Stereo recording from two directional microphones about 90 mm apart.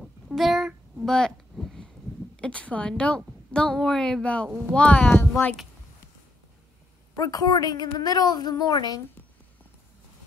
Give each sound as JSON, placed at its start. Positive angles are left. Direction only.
{"t": 0.0, "sound": "a sound", "side_deg": 0}
{"t": 2.3, "sound": "a woman's voice", "side_deg": 10}
{"t": 4.5, "sound": "speech", "side_deg": -15}
{"t": 4.7, "sound": "a woman's voice", "side_deg": 15}
{"t": 7.2, "sound": "a woman's voice", "side_deg": 40}